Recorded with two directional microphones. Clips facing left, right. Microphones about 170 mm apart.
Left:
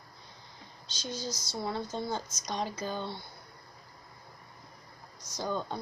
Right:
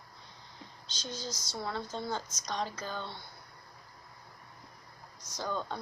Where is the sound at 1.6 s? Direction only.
10° left (ahead or behind).